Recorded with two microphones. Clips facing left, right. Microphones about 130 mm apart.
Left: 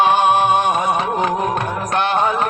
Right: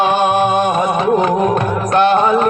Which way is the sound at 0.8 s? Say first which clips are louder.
Right 5 dB; 40° right (ahead or behind).